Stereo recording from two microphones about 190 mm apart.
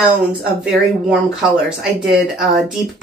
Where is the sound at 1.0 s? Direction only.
5° right (ahead or behind).